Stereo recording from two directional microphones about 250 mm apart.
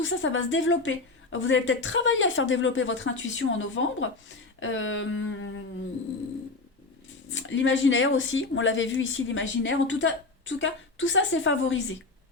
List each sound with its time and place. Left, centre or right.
0.0 s speech: left
7.3 s speech: left